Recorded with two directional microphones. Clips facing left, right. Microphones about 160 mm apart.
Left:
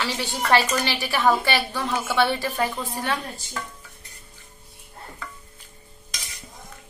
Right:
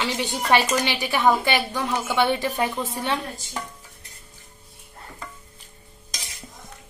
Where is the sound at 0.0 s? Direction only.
20° right (ahead or behind).